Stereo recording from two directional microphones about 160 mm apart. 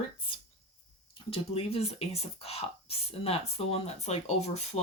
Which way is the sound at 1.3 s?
35° left (ahead or behind).